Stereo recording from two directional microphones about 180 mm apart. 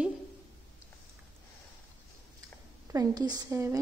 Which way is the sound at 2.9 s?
20° right (ahead or behind).